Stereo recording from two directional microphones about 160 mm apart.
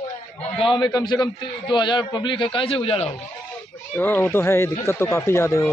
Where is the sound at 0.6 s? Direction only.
30° left (ahead or behind).